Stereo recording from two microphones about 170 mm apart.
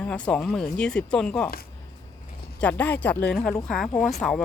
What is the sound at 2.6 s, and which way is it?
Speech, 10° left (ahead or behind).